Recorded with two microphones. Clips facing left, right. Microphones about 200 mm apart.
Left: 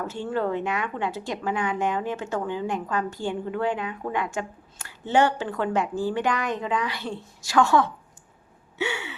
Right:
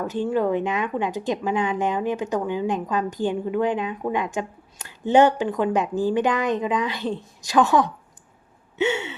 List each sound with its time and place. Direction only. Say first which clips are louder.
0.0 s speech: right 5 dB; 15° right (ahead or behind)
8.8 s gasp: right 6 dB; 20° right (ahead or behind)